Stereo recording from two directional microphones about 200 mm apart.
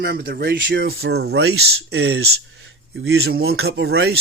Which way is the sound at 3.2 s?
55° right (ahead or behind).